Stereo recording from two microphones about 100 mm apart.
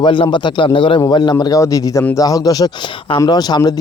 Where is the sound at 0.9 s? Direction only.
45° left (ahead or behind).